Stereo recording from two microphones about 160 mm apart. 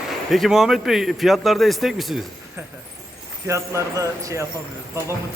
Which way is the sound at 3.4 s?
20° right (ahead or behind).